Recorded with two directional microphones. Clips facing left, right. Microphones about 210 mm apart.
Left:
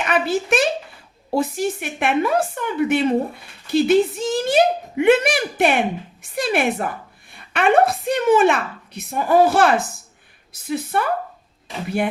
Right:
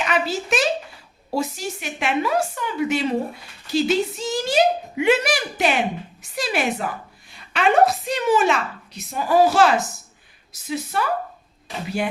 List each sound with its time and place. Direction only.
0.0 s a woman's voice: 55° left (ahead or behind)